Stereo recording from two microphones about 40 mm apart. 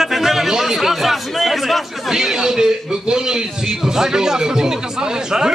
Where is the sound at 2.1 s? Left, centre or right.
Centre.